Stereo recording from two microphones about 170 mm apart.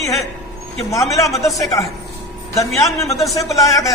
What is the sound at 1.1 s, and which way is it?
Speech, 20° left (ahead or behind).